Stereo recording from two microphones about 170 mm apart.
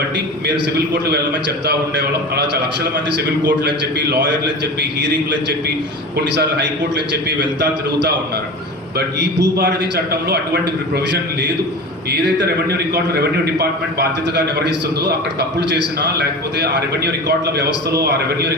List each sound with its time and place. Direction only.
1.1 s a man's voice: 75° right (ahead or behind)
6.1 s a man's voice: 80° right
9.1 s a man's voice: 80° right
13.6 s a man's voice: 75° right (ahead or behind)